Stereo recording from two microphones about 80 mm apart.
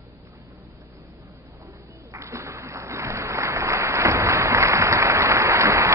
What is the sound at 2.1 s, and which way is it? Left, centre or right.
Applause, right.